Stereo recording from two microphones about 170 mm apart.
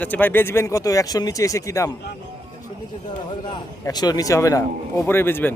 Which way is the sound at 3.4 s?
25° left (ahead or behind).